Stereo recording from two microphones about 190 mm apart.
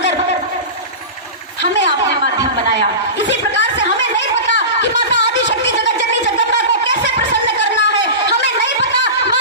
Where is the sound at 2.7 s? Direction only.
70° left (ahead or behind).